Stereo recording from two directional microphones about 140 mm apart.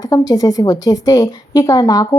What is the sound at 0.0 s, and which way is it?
A woman's voice, 25° left (ahead or behind).